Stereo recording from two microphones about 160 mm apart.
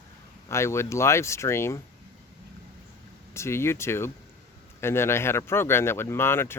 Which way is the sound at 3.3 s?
15° left (ahead or behind).